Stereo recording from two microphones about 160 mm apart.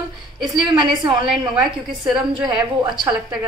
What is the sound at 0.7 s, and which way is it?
Speech, 30° right (ahead or behind).